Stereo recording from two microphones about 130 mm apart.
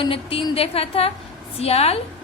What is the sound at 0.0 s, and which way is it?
A woman's voice, 45° left (ahead or behind).